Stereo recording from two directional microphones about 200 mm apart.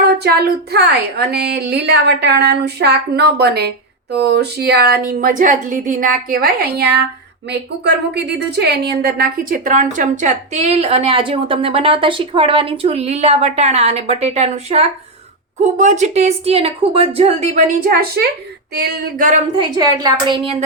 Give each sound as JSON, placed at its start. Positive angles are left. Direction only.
{"t": 0.2, "sound": "a woman's voice", "side_deg": -50}
{"t": 19.5, "sound": "a woman's voice", "side_deg": -20}